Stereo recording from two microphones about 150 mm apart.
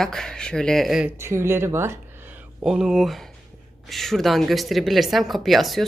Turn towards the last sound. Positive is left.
turn(degrees=0)  # may be behind; listen again after turning